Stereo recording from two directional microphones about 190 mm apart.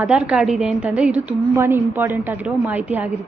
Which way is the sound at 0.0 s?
5° right (ahead or behind).